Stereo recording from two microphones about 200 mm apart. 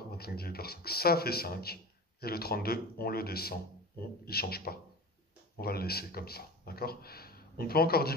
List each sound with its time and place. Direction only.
0.1 s speech: 50° left (ahead or behind)